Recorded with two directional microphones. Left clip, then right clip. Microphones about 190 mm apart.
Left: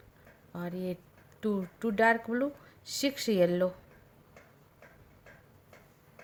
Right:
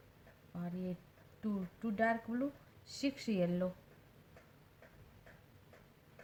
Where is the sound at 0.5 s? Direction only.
50° left (ahead or behind).